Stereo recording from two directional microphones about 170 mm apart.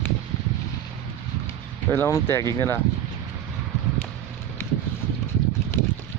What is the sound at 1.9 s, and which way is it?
Speech, 15° left (ahead or behind).